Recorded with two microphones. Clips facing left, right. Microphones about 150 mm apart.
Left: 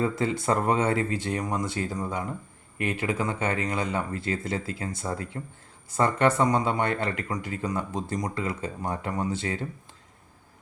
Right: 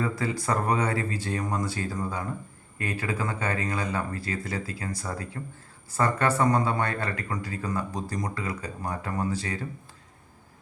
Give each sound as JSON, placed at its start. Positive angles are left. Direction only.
{"t": 0.0, "sound": "speech", "side_deg": 25}